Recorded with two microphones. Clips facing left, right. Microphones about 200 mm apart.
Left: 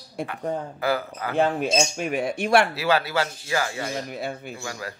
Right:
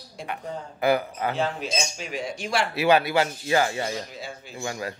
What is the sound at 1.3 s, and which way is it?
Speech, 55° left (ahead or behind).